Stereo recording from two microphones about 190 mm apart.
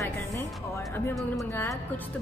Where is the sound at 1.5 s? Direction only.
10° left (ahead or behind).